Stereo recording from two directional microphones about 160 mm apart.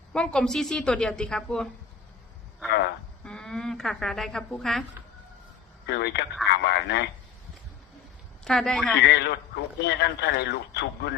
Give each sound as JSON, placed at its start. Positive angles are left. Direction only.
{"t": 0.1, "sound": "a woman's voice", "side_deg": 5}
{"t": 3.2, "sound": "a woman's voice", "side_deg": 5}
{"t": 5.8, "sound": "a man's voice", "side_deg": 90}
{"t": 8.4, "sound": "a woman's voice", "side_deg": 5}
{"t": 9.0, "sound": "a man's voice", "side_deg": 90}